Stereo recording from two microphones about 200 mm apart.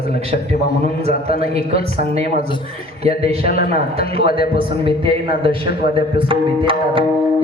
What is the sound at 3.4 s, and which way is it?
Speech, 45° left (ahead or behind).